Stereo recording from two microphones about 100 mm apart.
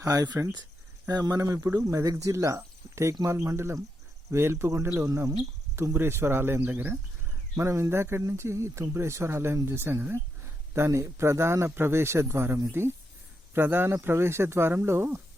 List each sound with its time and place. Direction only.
0.0 s speech: 35° right (ahead or behind); by 7.0 s 15° right (ahead or behind)
7.5 s speech: 30° right (ahead or behind)